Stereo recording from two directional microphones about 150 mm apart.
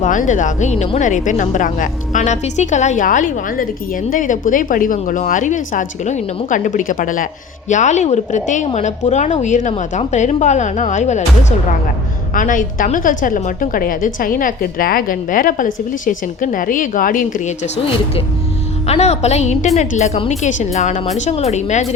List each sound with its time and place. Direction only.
0.0 s a woman's voice: 60° left (ahead or behind)
7.7 s a woman's voice: 55° left (ahead or behind)
12.3 s a woman's voice: 60° left (ahead or behind)
18.9 s a woman's voice: 45° left (ahead or behind)